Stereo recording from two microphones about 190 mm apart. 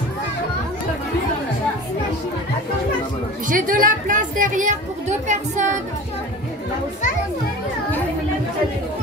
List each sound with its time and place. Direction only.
3.4 s speech: 45° right (ahead or behind)